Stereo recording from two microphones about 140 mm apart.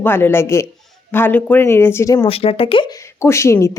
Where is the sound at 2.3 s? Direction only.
45° left (ahead or behind).